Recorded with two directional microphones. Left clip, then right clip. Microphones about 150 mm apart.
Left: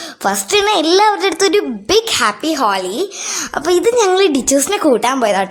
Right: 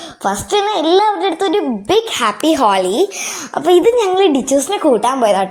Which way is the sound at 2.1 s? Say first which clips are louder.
Right 1 dB; 5° right (ahead or behind).